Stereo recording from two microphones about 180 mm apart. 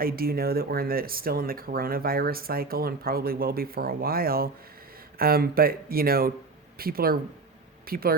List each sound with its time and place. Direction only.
0.0 s speech: 55° right (ahead or behind)